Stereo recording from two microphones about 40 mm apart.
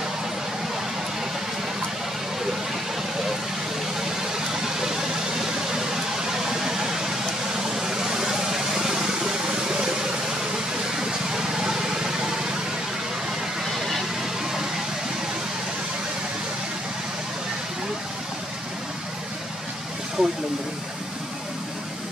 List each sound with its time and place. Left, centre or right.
4.2 s vehicle: centre
6.5 s vehicle: centre
11.0 s a sound: centre
13.7 s vehicle: centre
20.2 s vehicle: right